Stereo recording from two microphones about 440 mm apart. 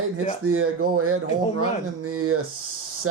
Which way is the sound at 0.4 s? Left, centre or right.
Right.